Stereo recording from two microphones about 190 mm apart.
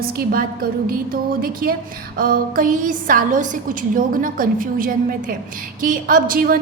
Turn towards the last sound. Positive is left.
turn(degrees=-50)  # may be behind; listen again after turning